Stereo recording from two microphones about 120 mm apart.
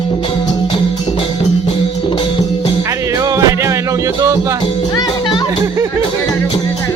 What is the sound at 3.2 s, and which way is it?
Music, 30° right (ahead or behind).